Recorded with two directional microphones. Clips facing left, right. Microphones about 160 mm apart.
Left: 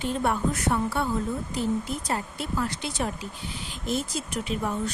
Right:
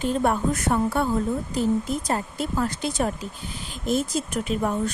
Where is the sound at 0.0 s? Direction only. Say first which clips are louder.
Right 3 dB; 45° right (ahead or behind).